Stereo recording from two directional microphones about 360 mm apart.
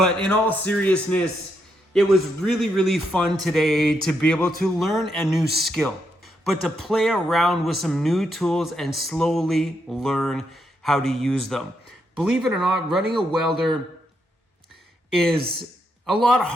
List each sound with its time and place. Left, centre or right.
0.0 s speech: centre
15.1 s speech: centre